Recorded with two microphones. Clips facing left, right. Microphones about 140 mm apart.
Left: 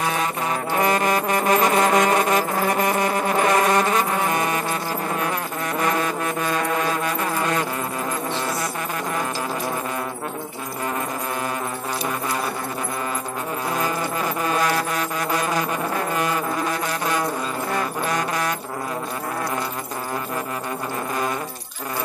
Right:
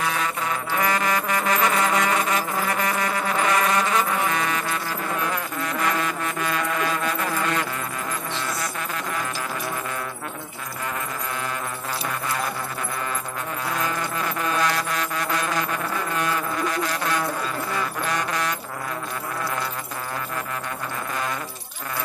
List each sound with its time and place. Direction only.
0.7 s music: 25° left (ahead or behind)
1.9 s music: 45° left (ahead or behind)
2.7 s music: 25° left (ahead or behind)
6.0 s music: 30° left (ahead or behind)